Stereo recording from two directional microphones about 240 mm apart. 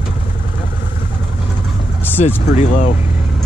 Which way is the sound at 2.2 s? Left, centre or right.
Left.